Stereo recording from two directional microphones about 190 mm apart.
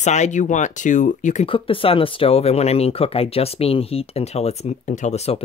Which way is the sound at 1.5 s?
30° left (ahead or behind).